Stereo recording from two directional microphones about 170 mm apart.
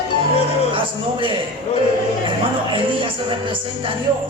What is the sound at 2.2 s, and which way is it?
Music, 30° right (ahead or behind).